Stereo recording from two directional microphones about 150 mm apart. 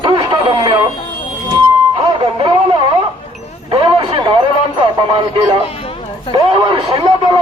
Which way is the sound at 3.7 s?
35° right (ahead or behind).